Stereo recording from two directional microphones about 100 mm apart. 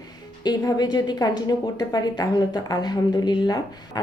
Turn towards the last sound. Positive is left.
turn(degrees=45)  # may be behind; listen again after turning